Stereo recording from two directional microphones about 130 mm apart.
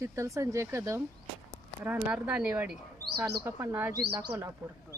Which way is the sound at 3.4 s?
15° right (ahead or behind).